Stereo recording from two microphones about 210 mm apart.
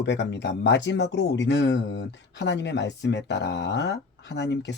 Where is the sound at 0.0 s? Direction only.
55° left (ahead or behind).